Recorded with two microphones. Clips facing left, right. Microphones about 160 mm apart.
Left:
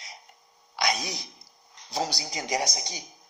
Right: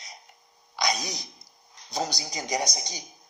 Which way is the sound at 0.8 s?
40° right (ahead or behind).